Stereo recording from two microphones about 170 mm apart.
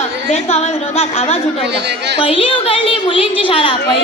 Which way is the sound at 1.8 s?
85° right.